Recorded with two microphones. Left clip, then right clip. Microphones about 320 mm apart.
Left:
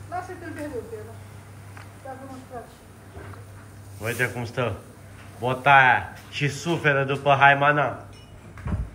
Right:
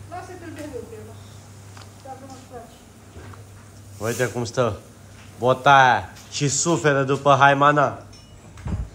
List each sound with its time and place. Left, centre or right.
0.1 s snake: centre
2.5 s a woman's voice: centre
4.0 s a man's voice: centre
8.6 s clip-clop: right